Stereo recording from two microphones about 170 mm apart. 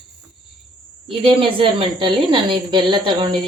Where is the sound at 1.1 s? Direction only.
30° right (ahead or behind).